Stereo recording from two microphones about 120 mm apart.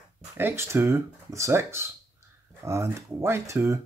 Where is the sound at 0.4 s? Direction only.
20° right (ahead or behind).